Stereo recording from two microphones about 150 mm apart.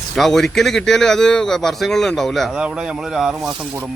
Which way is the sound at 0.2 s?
Centre (ahead or behind).